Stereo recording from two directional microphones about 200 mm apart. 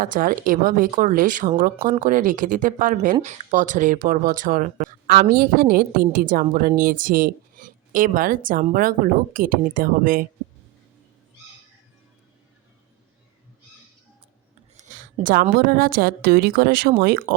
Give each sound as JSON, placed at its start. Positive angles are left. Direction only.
{"t": 0.0, "sound": "speech", "side_deg": -45}
{"t": 14.8, "sound": "speech", "side_deg": -40}